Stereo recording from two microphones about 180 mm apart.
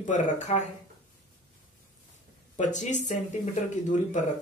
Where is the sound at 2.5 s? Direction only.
40° left (ahead or behind).